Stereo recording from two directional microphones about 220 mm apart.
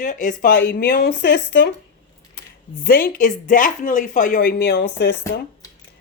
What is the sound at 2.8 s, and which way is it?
Speech, 40° left (ahead or behind).